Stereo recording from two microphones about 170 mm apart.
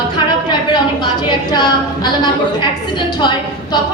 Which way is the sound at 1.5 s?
25° left (ahead or behind).